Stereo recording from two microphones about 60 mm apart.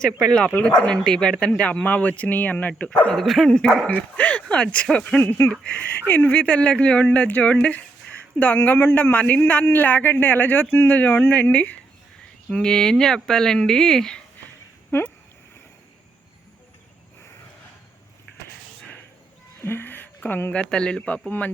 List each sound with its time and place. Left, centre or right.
0.4 s speech: left
0.9 s speech: centre
3.1 s speech: centre
3.8 s speech: left
5.2 s speech: left
5.5 s speech: left
12.5 s speech: centre
14.9 s speech: left
19.6 s a sound: left
20.5 s speech: centre